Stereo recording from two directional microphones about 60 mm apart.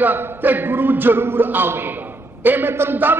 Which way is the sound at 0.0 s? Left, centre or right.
Right.